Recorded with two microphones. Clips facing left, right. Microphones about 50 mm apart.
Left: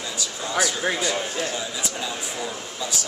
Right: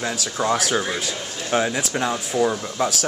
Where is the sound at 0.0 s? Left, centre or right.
Right.